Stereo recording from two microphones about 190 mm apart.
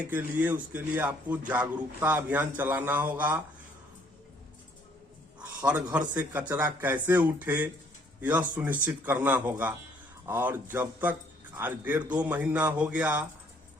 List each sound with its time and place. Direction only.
0.0 s speech: 10° right (ahead or behind)
6.1 s speech: 10° right (ahead or behind)